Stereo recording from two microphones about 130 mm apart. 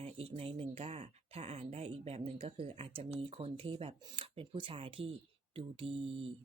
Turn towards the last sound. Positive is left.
turn(degrees=-45)  # may be behind; listen again after turning